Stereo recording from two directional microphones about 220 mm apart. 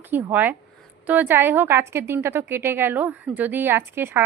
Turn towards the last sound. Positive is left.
turn(degrees=-10)  # may be behind; listen again after turning